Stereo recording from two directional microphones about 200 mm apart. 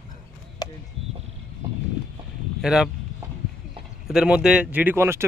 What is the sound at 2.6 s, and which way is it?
Speech, 5° right (ahead or behind).